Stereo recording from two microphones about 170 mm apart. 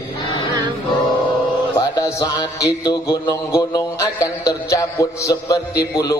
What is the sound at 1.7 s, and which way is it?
Mantra, 25° left (ahead or behind).